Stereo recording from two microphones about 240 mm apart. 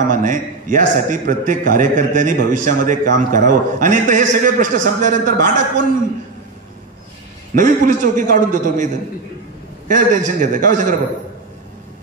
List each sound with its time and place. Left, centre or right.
0.1 s a man's voice: right
7.5 s a man's voice: right